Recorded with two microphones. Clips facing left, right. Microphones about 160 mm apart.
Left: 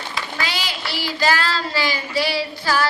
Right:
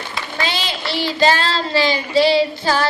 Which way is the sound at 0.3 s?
25° right (ahead or behind).